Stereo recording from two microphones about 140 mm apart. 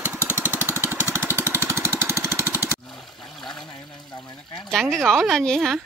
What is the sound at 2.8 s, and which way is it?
Trickle, centre (ahead or behind).